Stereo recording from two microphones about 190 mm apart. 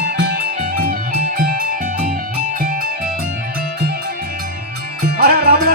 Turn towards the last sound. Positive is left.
turn(degrees=-55)  # may be behind; listen again after turning